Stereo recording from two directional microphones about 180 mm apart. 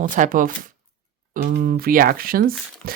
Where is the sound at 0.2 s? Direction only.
50° right (ahead or behind).